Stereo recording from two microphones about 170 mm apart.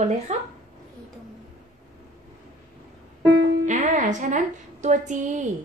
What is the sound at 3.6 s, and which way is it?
A woman's voice, 45° right (ahead or behind).